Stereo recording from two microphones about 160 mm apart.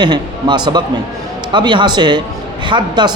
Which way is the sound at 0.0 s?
30° right (ahead or behind).